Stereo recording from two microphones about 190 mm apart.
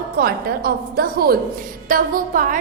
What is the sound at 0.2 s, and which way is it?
A woman's voice, 55° right (ahead or behind).